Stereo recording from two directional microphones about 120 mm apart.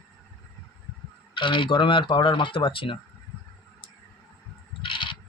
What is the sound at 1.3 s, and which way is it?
Speech, 45° left (ahead or behind).